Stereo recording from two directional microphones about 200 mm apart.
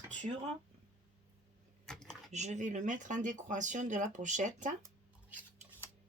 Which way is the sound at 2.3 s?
35° right (ahead or behind).